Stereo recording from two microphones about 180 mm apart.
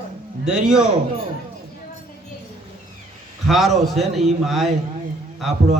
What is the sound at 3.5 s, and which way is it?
A man's voice, centre (ahead or behind).